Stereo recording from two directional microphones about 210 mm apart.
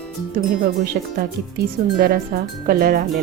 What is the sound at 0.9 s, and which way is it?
Speech, 45° right (ahead or behind).